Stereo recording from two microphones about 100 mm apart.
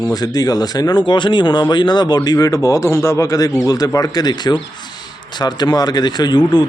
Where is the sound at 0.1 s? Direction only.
40° left (ahead or behind).